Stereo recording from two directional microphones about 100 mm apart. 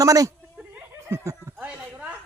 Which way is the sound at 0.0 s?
35° right (ahead or behind).